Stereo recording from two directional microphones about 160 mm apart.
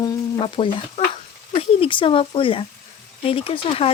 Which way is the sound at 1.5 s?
35° left (ahead or behind).